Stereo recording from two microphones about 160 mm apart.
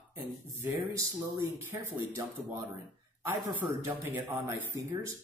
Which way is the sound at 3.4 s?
10° right (ahead or behind).